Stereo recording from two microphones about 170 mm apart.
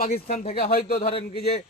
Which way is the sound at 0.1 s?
40° left (ahead or behind).